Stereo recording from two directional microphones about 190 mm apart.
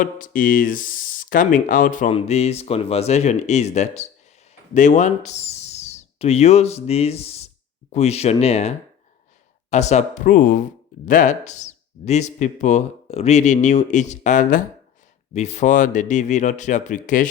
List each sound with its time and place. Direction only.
0.0 s speech: 45° left (ahead or behind)